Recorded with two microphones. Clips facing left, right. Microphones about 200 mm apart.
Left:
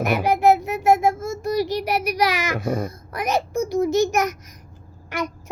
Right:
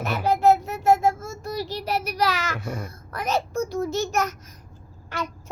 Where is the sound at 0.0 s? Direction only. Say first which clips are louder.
Left 2 dB; 15° left (ahead or behind).